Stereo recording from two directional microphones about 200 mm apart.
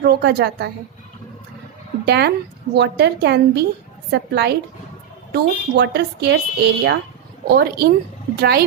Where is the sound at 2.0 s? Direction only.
55° right (ahead or behind).